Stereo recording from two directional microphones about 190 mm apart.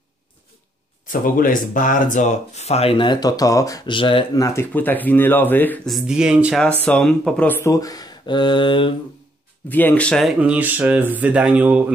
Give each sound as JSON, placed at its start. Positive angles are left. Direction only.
{"t": 1.0, "sound": "speech", "side_deg": 45}
{"t": 6.8, "sound": "speech", "side_deg": 5}
{"t": 9.7, "sound": "speech", "side_deg": 10}